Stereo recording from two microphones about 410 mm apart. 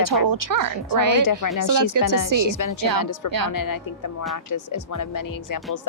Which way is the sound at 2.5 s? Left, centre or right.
Left.